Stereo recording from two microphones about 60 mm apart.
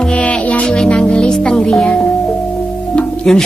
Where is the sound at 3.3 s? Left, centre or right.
Centre.